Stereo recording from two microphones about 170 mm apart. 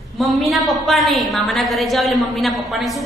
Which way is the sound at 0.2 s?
Centre (ahead or behind).